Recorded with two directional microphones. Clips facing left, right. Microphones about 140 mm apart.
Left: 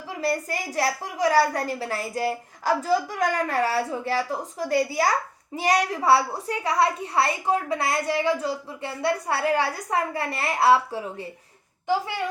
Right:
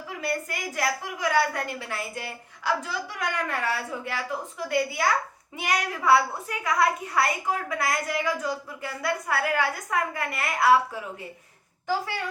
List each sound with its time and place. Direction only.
0.1 s a woman's voice: 35° left (ahead or behind)
11.9 s a woman's voice: 20° left (ahead or behind)